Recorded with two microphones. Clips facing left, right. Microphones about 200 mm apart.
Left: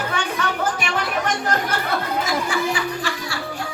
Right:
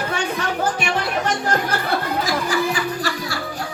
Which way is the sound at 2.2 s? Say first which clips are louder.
Right 2 dB; 35° right (ahead or behind).